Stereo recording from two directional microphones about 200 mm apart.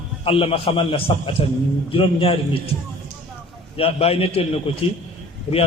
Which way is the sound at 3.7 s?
30° left (ahead or behind).